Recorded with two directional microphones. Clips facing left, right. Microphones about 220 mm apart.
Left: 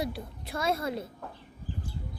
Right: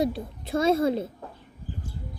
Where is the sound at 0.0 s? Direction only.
25° right (ahead or behind).